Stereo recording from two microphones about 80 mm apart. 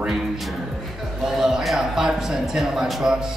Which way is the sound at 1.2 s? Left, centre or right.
Centre.